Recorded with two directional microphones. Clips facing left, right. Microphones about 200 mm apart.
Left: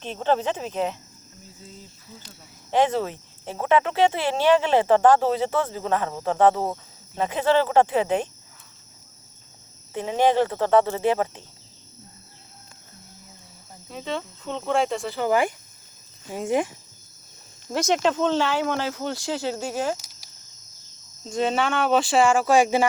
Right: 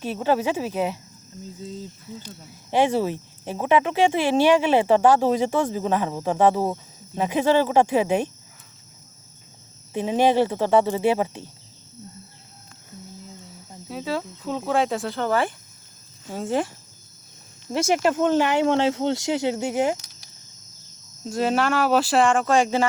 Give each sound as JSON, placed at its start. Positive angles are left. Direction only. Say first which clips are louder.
{"t": 0.0, "sound": "speech", "louder": "right 1 dB", "side_deg": -10}
{"t": 2.6, "sound": "speech", "louder": "right 1 dB", "side_deg": -10}
{"t": 9.9, "sound": "speech", "louder": "right 1 dB", "side_deg": -15}
{"t": 13.9, "sound": "speech", "louder": "right 3 dB", "side_deg": -5}
{"t": 15.3, "sound": "speech", "louder": "left 3 dB", "side_deg": 15}
{"t": 17.8, "sound": "speech", "louder": "right 1 dB", "side_deg": -10}
{"t": 21.2, "sound": "speech", "louder": "right 2 dB", "side_deg": -5}